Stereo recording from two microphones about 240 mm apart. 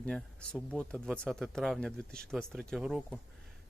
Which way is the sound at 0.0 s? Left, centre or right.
Centre.